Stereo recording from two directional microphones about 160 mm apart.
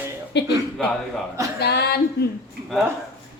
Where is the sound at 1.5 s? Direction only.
90° left.